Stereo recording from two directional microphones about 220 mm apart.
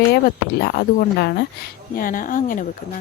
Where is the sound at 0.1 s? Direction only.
45° left (ahead or behind).